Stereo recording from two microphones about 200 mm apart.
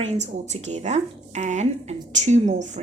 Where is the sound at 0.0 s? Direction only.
35° right (ahead or behind).